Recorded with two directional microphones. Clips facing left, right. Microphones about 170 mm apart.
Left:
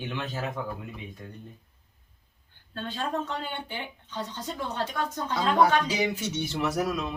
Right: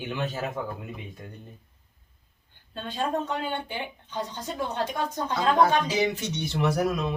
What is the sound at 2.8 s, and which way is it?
Speech, 15° right (ahead or behind).